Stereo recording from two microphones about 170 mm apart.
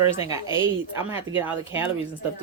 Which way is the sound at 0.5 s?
15° right (ahead or behind).